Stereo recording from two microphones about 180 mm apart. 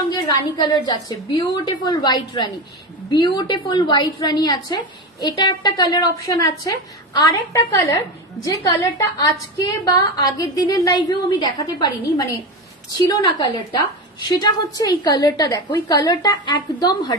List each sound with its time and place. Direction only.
0.1 s a woman's voice: 20° left (ahead or behind)